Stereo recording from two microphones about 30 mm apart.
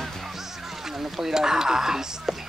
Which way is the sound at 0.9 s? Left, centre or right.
Centre.